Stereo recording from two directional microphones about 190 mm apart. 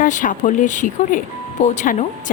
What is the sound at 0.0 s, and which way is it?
Speech, 45° left (ahead or behind).